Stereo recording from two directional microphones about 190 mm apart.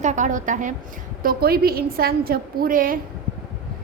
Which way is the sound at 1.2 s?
55° right (ahead or behind).